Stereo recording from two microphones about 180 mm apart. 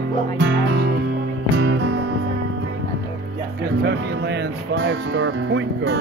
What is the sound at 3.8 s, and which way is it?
Speech, 70° right (ahead or behind).